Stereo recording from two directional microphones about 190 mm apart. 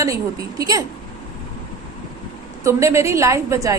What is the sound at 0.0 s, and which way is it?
Speech, 15° right (ahead or behind).